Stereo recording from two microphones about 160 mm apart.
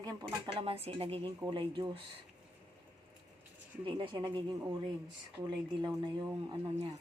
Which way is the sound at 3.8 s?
30° right (ahead or behind).